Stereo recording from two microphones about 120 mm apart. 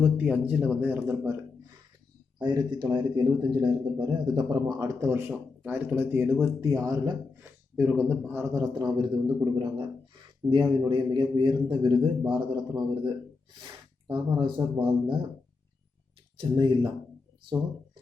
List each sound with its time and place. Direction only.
0.0 s speech: 10° right (ahead or behind)
2.4 s speech: 40° right (ahead or behind)
7.8 s speech: 10° right (ahead or behind)
8.3 s speech: 20° right (ahead or behind)
8.6 s a man's voice: 35° right (ahead or behind)
16.4 s speech: 40° right (ahead or behind)